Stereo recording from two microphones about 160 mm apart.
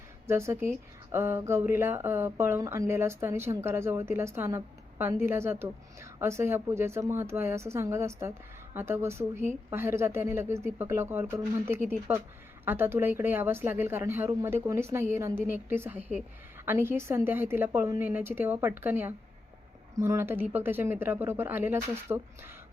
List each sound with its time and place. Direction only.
0.3 s speech: 15° right (ahead or behind)